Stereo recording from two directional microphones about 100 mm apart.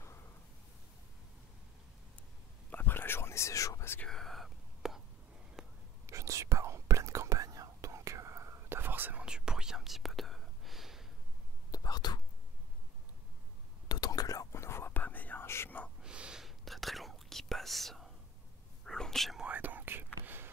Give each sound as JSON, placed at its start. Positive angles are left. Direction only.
{"t": 2.7, "sound": "whispering", "side_deg": 20}
{"t": 4.0, "sound": "whispering", "side_deg": 5}
{"t": 5.6, "sound": "a sound", "side_deg": -5}
{"t": 6.0, "sound": "whispering", "side_deg": -30}
{"t": 9.2, "sound": "whispering", "side_deg": -10}
{"t": 11.7, "sound": "whispering", "side_deg": 40}
{"t": 13.8, "sound": "whispering", "side_deg": 40}
{"t": 16.0, "sound": "whispering", "side_deg": -10}
{"t": 19.4, "sound": "whispering", "side_deg": -15}